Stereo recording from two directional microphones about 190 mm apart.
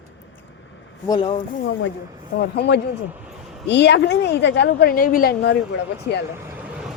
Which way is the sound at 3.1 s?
5° right (ahead or behind).